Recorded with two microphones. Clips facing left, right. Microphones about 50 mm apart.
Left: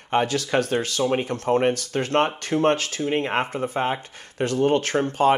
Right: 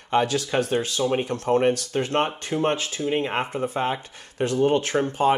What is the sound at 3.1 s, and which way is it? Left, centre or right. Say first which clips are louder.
Speech: left 1 dB; left.